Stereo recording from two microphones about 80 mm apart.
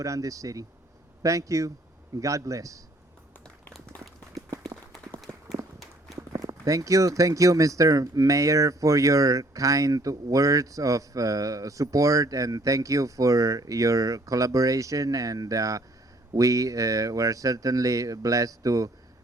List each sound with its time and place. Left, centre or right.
0.0 s speech: right
5.3 s run: right
6.3 s speech: right